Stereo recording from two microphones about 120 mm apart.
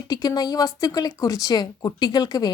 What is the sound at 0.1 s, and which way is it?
A woman's voice, 30° left (ahead or behind).